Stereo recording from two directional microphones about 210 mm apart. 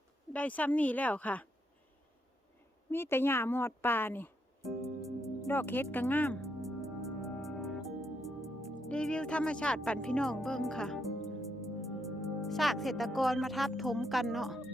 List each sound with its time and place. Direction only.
0.3 s speech: 5° left (ahead or behind)
2.9 s speech: 10° left (ahead or behind)
5.5 s music: 10° left (ahead or behind)
8.9 s speech: 5° left (ahead or behind)